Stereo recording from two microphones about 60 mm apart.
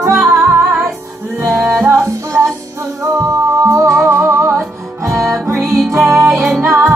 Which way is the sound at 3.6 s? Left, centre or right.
Right.